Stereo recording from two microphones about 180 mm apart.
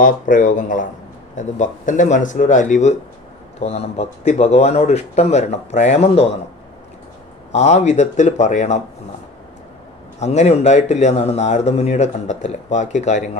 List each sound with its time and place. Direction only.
0.0 s speech: 45° left (ahead or behind)
7.5 s speech: 40° left (ahead or behind)
10.2 s speech: 40° left (ahead or behind)